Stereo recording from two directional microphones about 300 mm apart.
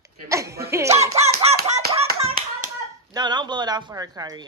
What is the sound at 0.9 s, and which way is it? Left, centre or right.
Baby laughter, right.